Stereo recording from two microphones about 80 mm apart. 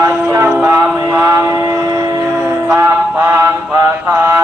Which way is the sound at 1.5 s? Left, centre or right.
Right.